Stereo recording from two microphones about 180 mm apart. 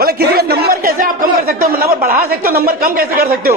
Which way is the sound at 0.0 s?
60° right (ahead or behind).